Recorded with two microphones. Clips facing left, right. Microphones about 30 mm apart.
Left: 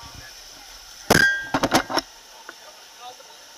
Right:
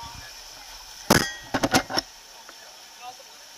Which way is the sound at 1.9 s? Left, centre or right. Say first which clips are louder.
Left 4 dB; left.